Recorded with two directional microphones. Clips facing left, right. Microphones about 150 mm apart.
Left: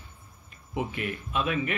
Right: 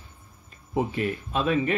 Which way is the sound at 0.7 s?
35° right (ahead or behind).